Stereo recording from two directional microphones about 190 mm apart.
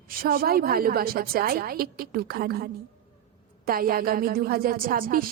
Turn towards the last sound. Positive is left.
turn(degrees=-50)  # may be behind; listen again after turning